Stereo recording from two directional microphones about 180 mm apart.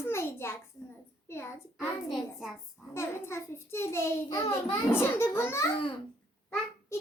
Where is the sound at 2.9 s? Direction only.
15° left (ahead or behind).